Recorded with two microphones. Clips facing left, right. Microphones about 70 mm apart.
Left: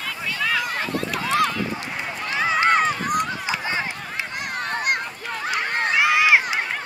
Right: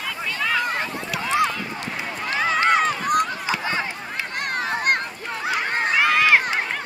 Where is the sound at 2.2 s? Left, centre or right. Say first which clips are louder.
Even; centre.